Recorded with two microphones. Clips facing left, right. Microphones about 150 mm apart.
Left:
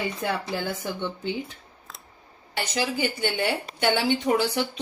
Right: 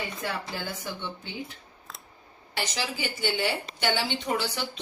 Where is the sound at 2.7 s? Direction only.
50° left (ahead or behind).